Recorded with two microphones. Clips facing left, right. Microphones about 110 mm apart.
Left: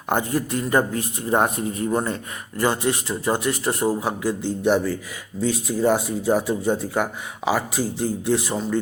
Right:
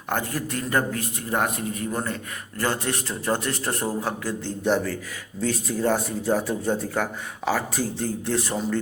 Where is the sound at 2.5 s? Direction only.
15° left (ahead or behind).